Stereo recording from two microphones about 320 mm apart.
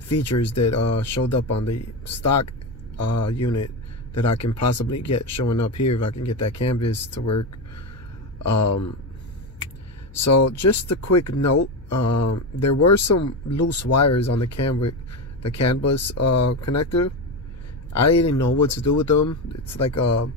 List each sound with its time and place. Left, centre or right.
0.1 s speech: left
10.2 s speech: left
18.5 s speech: left